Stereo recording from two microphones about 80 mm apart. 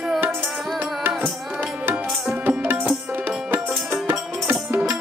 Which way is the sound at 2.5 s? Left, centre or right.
Centre.